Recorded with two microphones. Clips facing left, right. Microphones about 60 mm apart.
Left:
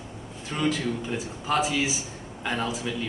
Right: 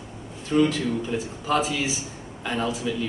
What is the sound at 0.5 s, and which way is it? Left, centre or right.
A man's voice, centre.